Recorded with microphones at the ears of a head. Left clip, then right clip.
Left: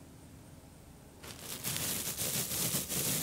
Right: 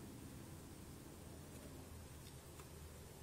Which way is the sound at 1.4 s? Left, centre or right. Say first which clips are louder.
Left 17 dB; left.